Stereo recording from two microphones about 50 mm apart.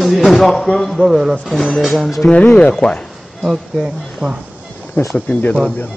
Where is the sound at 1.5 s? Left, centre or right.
Centre.